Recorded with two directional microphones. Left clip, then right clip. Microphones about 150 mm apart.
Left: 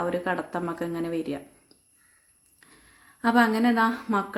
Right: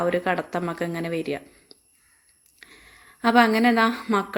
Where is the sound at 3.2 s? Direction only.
20° right (ahead or behind).